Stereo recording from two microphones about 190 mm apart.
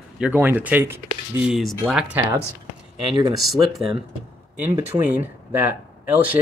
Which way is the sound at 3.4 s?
Centre (ahead or behind).